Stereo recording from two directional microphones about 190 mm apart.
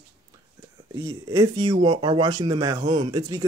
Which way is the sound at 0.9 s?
20° right (ahead or behind).